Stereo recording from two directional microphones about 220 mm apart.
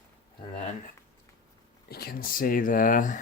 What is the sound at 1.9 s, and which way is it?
Speech, 45° left (ahead or behind).